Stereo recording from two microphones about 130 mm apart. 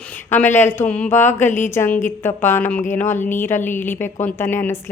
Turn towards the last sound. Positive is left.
turn(degrees=15)  # may be behind; listen again after turning